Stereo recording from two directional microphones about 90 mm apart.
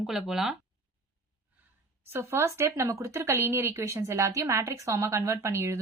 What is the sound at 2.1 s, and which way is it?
Speech, 30° right (ahead or behind).